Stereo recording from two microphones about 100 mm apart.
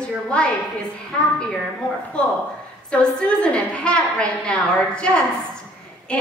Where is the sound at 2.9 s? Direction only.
10° left (ahead or behind).